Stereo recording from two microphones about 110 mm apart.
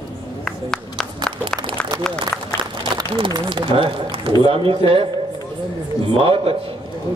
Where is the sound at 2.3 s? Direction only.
5° left (ahead or behind).